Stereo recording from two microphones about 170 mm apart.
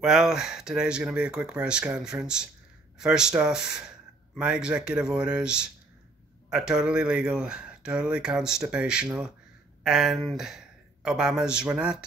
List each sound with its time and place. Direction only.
0.0 s speech: 5° right (ahead or behind)